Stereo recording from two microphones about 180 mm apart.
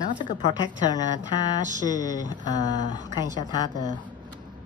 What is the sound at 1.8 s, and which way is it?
Speech, 20° left (ahead or behind).